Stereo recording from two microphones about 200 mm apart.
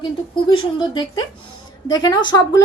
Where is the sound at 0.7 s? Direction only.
20° left (ahead or behind).